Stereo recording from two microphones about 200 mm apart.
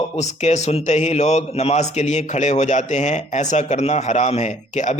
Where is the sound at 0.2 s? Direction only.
35° left (ahead or behind).